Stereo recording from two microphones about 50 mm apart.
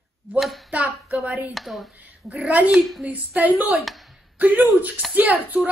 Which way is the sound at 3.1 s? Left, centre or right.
Right.